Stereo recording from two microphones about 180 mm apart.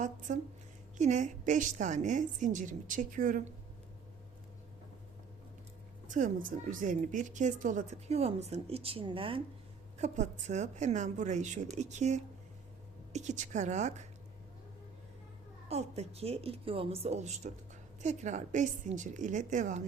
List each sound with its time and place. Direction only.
0.0 s a woman's voice: 45° right (ahead or behind)
6.1 s a woman's voice: 45° right (ahead or behind); by 9.4 s 30° right (ahead or behind)
10.0 s a woman's voice: 40° right (ahead or behind)
15.7 s a woman's voice: 35° right (ahead or behind)